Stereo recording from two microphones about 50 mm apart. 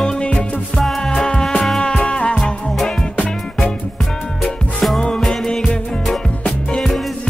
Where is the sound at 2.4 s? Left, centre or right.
Centre.